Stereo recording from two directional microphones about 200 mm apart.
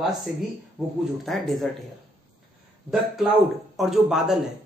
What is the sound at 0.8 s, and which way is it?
Speech, 5° right (ahead or behind).